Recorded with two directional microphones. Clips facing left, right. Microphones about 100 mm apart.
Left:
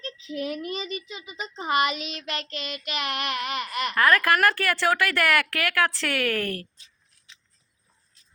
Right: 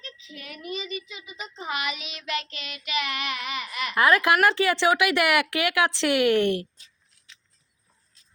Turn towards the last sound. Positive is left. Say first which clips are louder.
# right 6 dB
turn(degrees=-20)  # may be behind; listen again after turning